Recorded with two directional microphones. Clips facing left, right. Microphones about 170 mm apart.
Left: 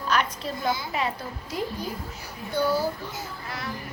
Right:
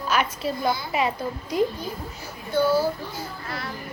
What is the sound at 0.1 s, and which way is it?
A child's voice, 10° right (ahead or behind).